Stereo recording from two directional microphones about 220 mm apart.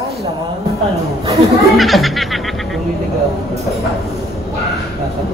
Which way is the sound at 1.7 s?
Centre (ahead or behind).